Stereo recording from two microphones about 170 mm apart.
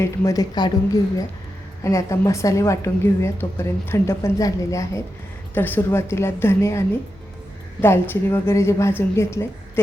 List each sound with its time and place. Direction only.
0.0 s speech: 20° left (ahead or behind)
1.8 s a woman's voice: 15° left (ahead or behind)